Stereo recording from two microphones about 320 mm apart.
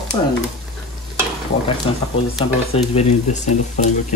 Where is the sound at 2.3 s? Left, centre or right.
Centre.